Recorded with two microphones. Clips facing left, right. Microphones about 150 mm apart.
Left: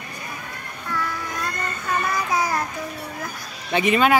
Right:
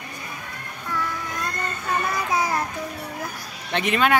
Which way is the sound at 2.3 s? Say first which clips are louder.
Even; 25° right (ahead or behind).